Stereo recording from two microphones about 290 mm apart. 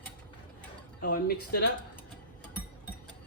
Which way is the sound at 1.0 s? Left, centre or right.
Left.